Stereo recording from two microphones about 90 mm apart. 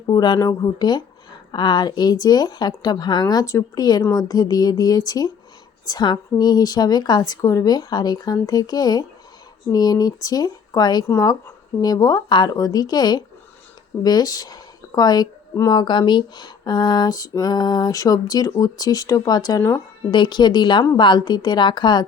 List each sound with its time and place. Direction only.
0.1 s speech: 50° left (ahead or behind)
3.4 s speech: 35° left (ahead or behind)
20.1 s a woman's voice: 60° left (ahead or behind)